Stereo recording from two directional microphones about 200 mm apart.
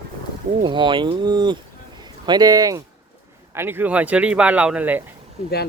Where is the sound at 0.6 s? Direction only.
25° right (ahead or behind).